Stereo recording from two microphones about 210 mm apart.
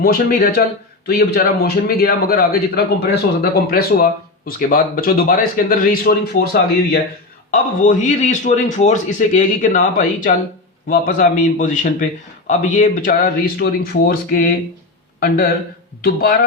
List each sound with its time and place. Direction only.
0.0 s a man's voice: 45° left (ahead or behind)
16.0 s speech: 45° left (ahead or behind)